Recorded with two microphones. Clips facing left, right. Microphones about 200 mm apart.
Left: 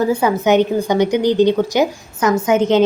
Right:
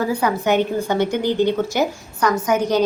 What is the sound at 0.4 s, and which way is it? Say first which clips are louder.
A woman's voice: left 6 dB; 20° left (ahead or behind).